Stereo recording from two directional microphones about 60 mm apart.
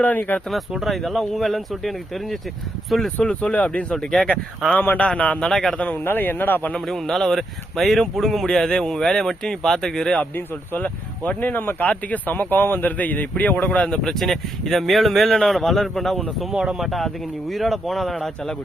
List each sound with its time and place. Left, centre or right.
0.0 s speech: left
0.7 s speech: centre
3.2 s a man's voice: centre
5.5 s speech: centre
5.7 s speech: centre
6.0 s a man's voice: left
6.7 s speech: centre
10.2 s a man's voice: left; by 14.1 s centre
14.1 s speech: centre